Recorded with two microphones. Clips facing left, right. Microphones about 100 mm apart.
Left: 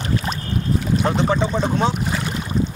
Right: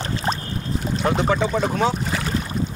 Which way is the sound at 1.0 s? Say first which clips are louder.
Right 2 dB; 30° left (ahead or behind).